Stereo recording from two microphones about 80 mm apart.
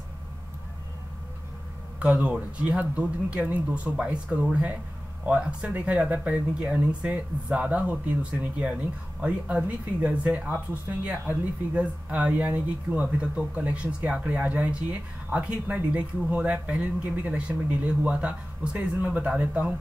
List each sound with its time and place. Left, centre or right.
2.0 s speech: centre